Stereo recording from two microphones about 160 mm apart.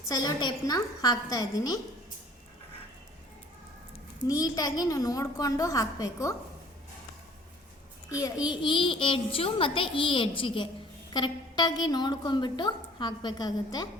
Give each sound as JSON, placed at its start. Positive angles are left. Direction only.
{"t": 0.1, "sound": "a woman's voice", "side_deg": 25}
{"t": 4.2, "sound": "a woman's voice", "side_deg": 20}
{"t": 8.4, "sound": "a child's voice", "side_deg": 30}